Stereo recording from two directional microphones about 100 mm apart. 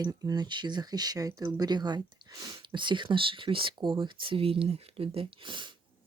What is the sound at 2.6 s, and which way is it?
Speech, 55° right (ahead or behind).